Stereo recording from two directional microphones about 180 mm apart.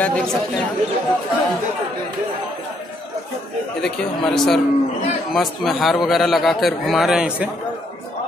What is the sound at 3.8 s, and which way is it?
A man's voice, 5° left (ahead or behind).